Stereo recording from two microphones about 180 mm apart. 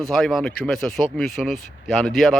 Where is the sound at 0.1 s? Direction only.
Centre (ahead or behind).